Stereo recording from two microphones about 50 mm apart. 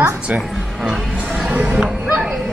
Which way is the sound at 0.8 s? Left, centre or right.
Right.